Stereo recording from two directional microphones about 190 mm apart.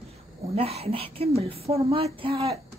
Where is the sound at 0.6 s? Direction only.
30° right (ahead or behind).